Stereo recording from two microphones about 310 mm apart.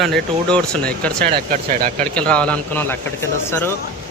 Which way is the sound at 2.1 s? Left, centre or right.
Centre.